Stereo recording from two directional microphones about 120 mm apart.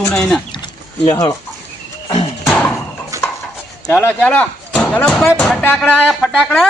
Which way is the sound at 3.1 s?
25° right (ahead or behind).